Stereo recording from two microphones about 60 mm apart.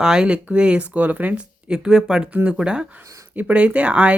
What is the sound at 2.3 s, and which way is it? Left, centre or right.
Speech, right.